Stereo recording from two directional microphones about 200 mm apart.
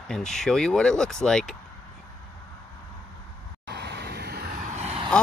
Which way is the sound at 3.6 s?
55° right (ahead or behind).